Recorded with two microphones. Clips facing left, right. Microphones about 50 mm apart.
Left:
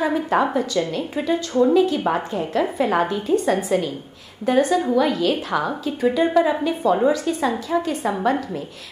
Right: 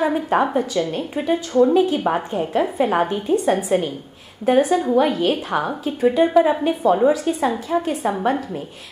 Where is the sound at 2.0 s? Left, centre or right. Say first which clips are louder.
Right 1 dB; centre.